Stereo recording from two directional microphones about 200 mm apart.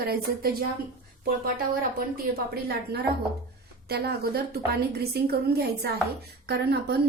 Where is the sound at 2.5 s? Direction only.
50° right (ahead or behind).